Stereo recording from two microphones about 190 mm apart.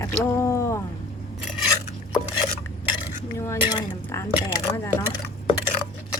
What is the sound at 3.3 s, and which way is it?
Speech, 15° left (ahead or behind).